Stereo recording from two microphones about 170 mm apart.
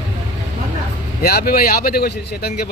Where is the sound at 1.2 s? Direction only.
65° left (ahead or behind).